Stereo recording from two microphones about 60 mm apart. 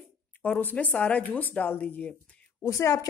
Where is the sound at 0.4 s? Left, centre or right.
Left.